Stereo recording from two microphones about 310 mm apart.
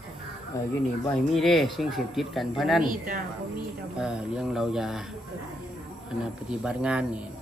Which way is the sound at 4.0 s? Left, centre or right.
Centre.